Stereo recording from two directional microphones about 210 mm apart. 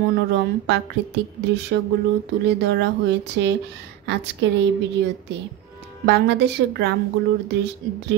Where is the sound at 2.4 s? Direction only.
55° right (ahead or behind).